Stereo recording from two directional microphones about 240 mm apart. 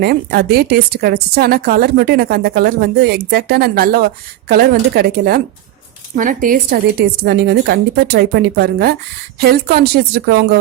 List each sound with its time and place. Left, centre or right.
0.0 s a woman's voice: right